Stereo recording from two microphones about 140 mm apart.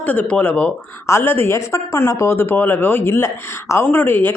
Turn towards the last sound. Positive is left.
turn(degrees=15)  # may be behind; listen again after turning